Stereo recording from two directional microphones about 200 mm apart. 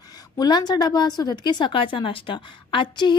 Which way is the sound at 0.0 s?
20° left (ahead or behind).